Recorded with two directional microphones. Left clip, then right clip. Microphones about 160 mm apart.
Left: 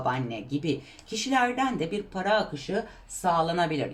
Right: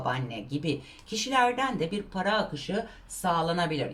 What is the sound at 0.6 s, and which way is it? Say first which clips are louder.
A woman's voice: left 2 dB; 20° left (ahead or behind).